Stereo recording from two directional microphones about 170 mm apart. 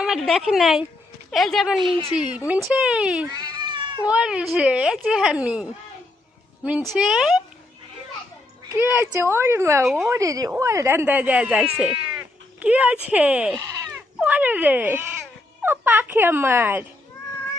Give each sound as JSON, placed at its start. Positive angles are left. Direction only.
{"t": 0.0, "sound": "speech", "side_deg": 0}
{"t": 3.2, "sound": "cat", "side_deg": -25}
{"t": 4.0, "sound": "speech", "side_deg": -5}
{"t": 6.7, "sound": "speech", "side_deg": -5}
{"t": 8.7, "sound": "speech", "side_deg": -15}
{"t": 9.8, "sound": "speech", "side_deg": 0}
{"t": 10.1, "sound": "speech", "side_deg": -20}